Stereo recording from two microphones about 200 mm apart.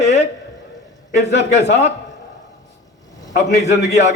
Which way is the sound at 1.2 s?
60° left (ahead or behind).